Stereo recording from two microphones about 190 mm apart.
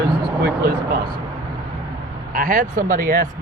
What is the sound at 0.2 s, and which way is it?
Speech, 55° right (ahead or behind).